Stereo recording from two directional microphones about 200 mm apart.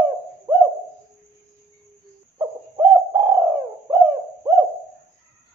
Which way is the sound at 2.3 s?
15° right (ahead or behind).